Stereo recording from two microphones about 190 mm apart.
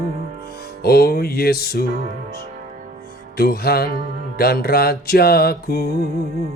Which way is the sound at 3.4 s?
55° left (ahead or behind).